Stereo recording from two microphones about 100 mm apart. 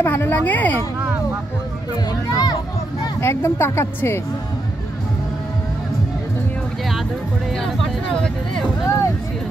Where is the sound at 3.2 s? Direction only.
25° left (ahead or behind).